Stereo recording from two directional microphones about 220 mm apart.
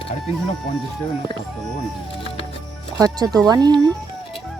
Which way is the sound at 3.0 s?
15° right (ahead or behind).